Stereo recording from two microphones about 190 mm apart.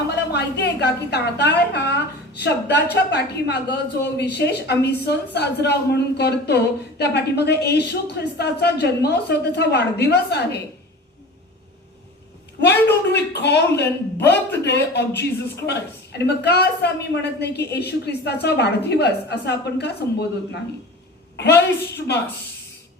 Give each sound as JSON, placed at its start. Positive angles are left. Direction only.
{"t": 0.3, "sound": "a woman's voice", "side_deg": 60}
{"t": 12.5, "sound": "a woman's voice", "side_deg": 60}